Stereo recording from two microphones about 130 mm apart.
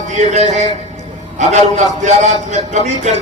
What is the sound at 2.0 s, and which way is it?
Speech, 60° right (ahead or behind).